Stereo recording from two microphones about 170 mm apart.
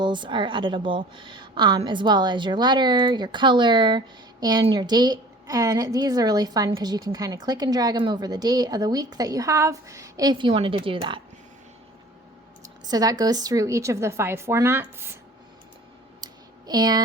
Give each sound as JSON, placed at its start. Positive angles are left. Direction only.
{"t": 0.0, "sound": "a woman's voice", "side_deg": -25}
{"t": 12.6, "sound": "a woman's voice", "side_deg": -20}
{"t": 16.2, "sound": "a sound", "side_deg": -25}